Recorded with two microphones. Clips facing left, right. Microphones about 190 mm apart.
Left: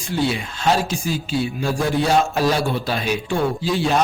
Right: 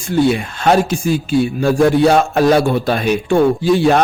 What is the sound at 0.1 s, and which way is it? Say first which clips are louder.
A man's voice: right 8 dB; 55° right (ahead or behind).